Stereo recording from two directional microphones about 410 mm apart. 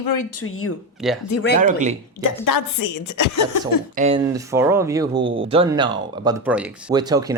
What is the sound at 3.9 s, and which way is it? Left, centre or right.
Speech, centre.